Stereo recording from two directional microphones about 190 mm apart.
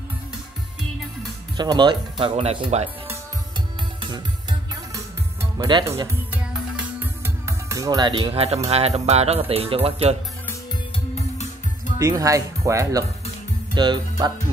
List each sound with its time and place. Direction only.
1.6 s speech: 25° right (ahead or behind)
4.0 s music: 25° right (ahead or behind)
5.8 s speech: 20° right (ahead or behind)
6.3 s music: 5° right (ahead or behind); by 8.5 s 30° right (ahead or behind)
8.6 s speech: 35° right (ahead or behind)
12.0 s speech: 20° right (ahead or behind)